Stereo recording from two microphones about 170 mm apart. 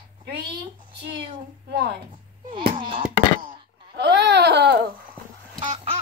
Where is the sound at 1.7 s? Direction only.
80° right.